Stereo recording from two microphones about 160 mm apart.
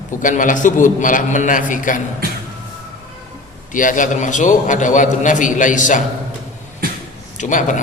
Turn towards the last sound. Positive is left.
turn(degrees=50)  # may be behind; listen again after turning